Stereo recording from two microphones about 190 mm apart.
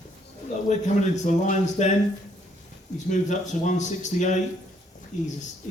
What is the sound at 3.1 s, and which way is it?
Speech, 40° left (ahead or behind).